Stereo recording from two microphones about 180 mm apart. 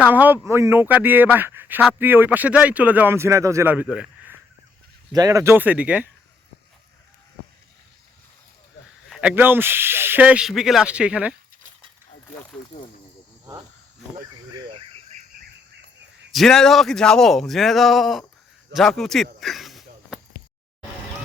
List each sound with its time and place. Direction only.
0.0 s speech: 10° right (ahead or behind)
5.1 s speech: 20° right (ahead or behind)
9.0 s a sound: centre (ahead or behind)
9.3 s speech: 10° right (ahead or behind)
14.2 s cricket: 25° right (ahead or behind)
16.3 s speech: centre (ahead or behind)
18.7 s a sound: centre (ahead or behind)